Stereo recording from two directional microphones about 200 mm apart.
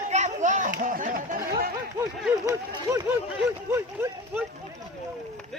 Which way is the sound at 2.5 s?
15° right (ahead or behind).